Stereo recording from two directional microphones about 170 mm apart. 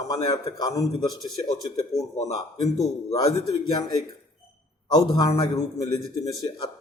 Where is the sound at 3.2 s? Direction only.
20° left (ahead or behind).